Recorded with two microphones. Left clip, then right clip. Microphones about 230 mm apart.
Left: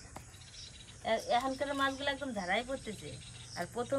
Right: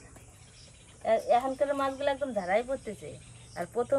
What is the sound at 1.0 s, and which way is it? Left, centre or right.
Speech, left.